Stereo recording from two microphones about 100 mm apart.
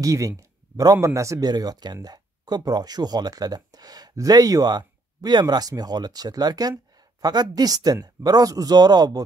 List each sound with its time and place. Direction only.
0.0 s speech: 35° right (ahead or behind)
0.4 s a sound: 40° right (ahead or behind)
1.0 s speech: 30° right (ahead or behind)
1.5 s speech: 45° right (ahead or behind)